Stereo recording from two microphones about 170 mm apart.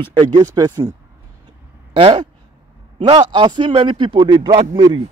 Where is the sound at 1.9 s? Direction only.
35° right (ahead or behind).